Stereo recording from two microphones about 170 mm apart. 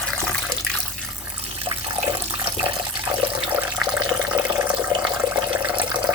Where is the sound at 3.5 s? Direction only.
10° right (ahead or behind).